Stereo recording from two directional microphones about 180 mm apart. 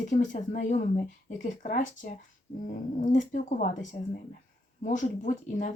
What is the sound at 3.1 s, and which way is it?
Speech, 45° left (ahead or behind).